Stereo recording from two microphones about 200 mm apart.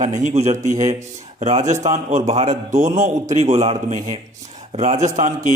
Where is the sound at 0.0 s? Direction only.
35° right (ahead or behind).